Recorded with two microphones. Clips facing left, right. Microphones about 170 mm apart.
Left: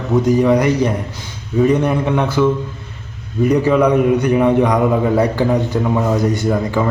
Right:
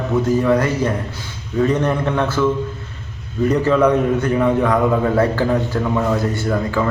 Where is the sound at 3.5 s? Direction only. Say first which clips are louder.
Left 2 dB; 15° left (ahead or behind).